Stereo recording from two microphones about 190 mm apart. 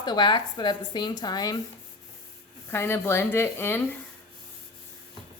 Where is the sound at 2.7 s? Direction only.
10° left (ahead or behind).